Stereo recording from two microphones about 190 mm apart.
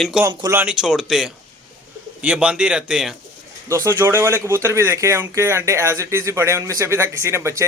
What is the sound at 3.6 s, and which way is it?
Speech, 15° right (ahead or behind).